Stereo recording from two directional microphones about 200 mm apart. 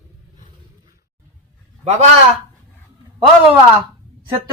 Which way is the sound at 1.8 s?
35° right (ahead or behind).